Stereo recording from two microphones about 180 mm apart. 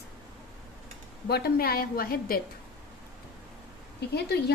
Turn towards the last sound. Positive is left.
turn(degrees=65)  # may be behind; listen again after turning